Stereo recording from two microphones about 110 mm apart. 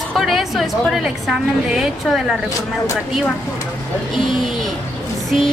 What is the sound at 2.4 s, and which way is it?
Speech, 30° left (ahead or behind).